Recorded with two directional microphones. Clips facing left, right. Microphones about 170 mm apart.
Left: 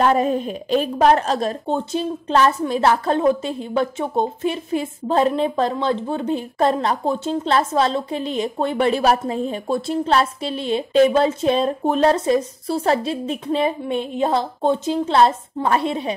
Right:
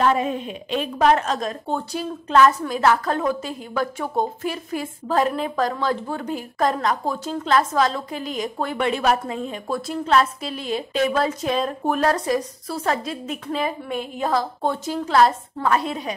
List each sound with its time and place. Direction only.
0.0 s a woman's voice: 40° left (ahead or behind)
1.7 s a woman's voice: 20° left (ahead or behind)